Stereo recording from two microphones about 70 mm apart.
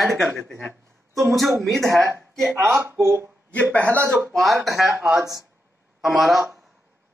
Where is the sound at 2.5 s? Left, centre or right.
Right.